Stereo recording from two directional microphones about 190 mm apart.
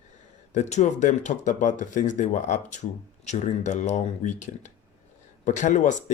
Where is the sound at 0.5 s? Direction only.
40° left (ahead or behind).